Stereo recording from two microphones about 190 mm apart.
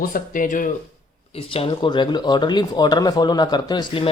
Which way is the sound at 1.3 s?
30° left (ahead or behind).